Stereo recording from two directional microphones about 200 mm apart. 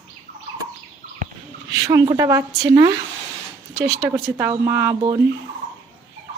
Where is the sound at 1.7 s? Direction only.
15° right (ahead or behind).